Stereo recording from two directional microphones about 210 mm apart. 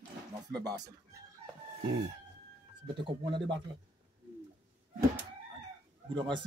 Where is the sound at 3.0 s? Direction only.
25° right (ahead or behind).